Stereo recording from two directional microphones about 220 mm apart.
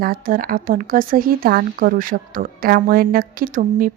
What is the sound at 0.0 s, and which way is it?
A woman's voice, 40° right (ahead or behind).